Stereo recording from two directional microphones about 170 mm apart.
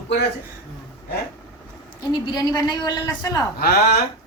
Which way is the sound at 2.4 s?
25° left (ahead or behind).